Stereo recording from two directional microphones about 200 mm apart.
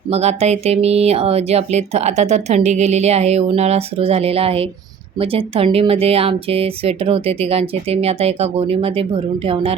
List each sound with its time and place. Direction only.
0.1 s speech: 30° right (ahead or behind)